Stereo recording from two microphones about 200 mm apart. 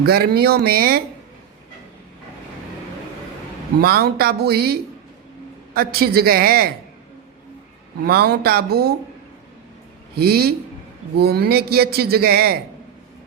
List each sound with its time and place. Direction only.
0.0 s speech: 50° right (ahead or behind)
3.8 s speech: 50° right (ahead or behind)
8.0 s speech: 50° right (ahead or behind)
10.2 s speech: 50° right (ahead or behind)